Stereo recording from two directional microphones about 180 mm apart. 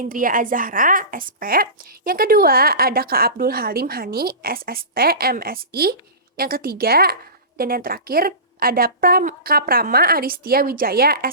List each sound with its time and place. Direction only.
0.0 s a woman's voice: 50° right (ahead or behind)